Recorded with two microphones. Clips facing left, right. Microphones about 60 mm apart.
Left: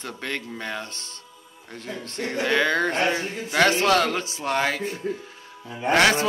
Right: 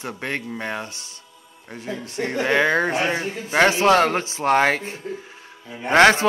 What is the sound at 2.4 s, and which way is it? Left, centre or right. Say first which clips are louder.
A man's voice: right 3 dB; right.